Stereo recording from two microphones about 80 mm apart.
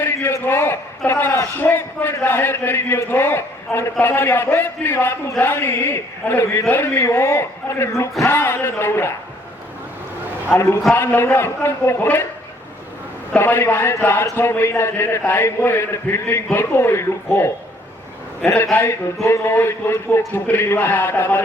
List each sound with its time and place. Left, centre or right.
0.0 s a sound: left
0.4 s a man's voice: left
10.5 s a man's voice: left
13.4 s a man's voice: left